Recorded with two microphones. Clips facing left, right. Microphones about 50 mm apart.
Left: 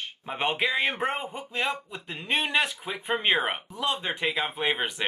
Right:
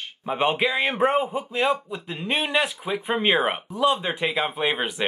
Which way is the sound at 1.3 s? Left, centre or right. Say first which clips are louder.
Right 7 dB; right.